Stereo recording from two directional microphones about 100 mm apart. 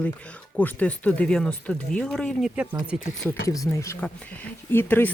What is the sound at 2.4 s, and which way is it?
Speech, 15° right (ahead or behind).